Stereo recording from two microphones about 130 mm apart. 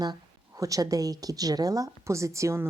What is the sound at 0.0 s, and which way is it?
Speech, 30° right (ahead or behind).